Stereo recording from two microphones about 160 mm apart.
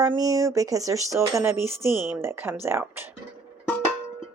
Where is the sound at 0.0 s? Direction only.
20° right (ahead or behind).